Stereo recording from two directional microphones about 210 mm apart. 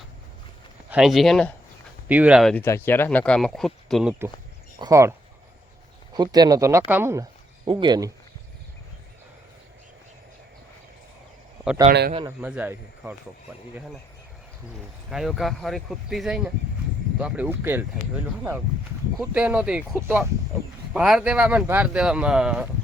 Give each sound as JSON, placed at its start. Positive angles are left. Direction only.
{"t": 0.9, "sound": "speech", "side_deg": -5}
{"t": 4.8, "sound": "speech", "side_deg": -15}
{"t": 6.1, "sound": "speech", "side_deg": -20}
{"t": 11.9, "sound": "a man's voice", "side_deg": -40}
{"t": 12.4, "sound": "speech", "side_deg": -5}
{"t": 15.1, "sound": "speech", "side_deg": 0}